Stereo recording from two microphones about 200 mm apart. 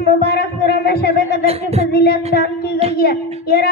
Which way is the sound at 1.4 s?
30° right (ahead or behind).